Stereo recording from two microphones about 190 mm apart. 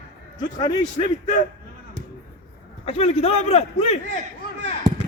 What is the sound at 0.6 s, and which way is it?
Speech, 25° left (ahead or behind).